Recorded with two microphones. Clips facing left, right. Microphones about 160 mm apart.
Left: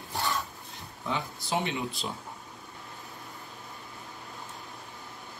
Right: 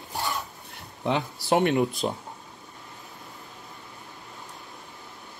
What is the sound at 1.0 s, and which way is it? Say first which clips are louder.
Speech: right 8 dB; 70° right (ahead or behind).